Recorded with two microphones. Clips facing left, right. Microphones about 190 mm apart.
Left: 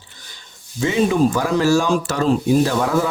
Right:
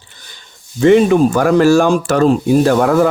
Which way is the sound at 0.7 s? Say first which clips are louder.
Right 8 dB; 60° right (ahead or behind).